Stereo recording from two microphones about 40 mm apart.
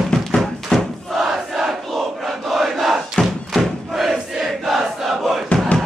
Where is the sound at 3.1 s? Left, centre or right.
Centre.